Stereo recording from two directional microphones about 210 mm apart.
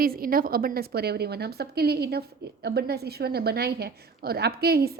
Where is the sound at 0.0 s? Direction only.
45° right (ahead or behind).